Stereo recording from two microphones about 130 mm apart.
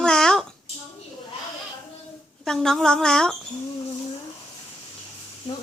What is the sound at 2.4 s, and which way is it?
Speech, 5° left (ahead or behind).